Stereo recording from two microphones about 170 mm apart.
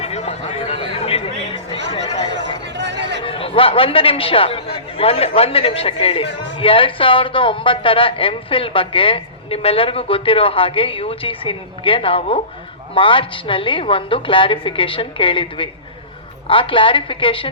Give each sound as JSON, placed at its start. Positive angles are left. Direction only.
{"t": 0.0, "sound": "chatter", "side_deg": 40}
{"t": 2.7, "sound": "chatter", "side_deg": -90}
{"t": 3.2, "sound": "a man's voice", "side_deg": 30}